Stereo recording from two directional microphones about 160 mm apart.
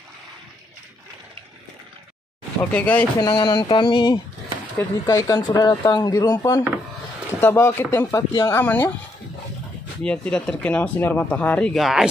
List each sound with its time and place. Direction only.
2.6 s speech: 10° left (ahead or behind)
3.2 s speech: 25° left (ahead or behind)
7.3 s speech: 10° left (ahead or behind)
10.0 s speech: 5° left (ahead or behind)